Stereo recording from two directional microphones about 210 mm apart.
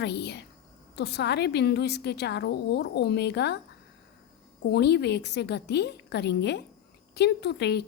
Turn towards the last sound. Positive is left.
turn(degrees=50)  # may be behind; listen again after turning